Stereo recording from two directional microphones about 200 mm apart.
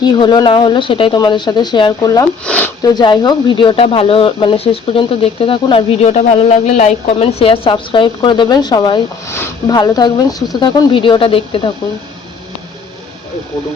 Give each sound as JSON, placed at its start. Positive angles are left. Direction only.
{"t": 0.0, "sound": "speech", "side_deg": 20}
{"t": 2.4, "sound": "speech", "side_deg": 5}
{"t": 2.8, "sound": "speech", "side_deg": 20}